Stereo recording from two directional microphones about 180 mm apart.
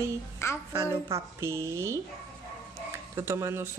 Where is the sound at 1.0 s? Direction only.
15° right (ahead or behind).